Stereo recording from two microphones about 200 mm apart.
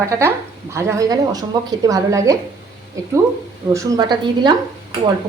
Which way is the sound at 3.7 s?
20° right (ahead or behind).